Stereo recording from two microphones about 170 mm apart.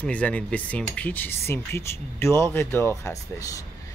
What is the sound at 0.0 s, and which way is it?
Speech, 10° left (ahead or behind).